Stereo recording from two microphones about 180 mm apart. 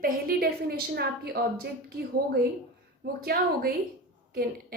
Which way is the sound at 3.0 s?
60° right (ahead or behind).